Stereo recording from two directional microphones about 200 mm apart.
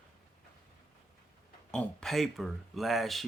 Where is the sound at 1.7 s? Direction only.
5° left (ahead or behind).